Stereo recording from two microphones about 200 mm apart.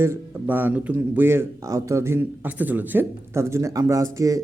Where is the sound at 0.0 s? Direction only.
10° right (ahead or behind).